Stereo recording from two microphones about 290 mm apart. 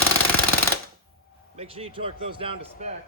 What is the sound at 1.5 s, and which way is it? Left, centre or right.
Speech, right.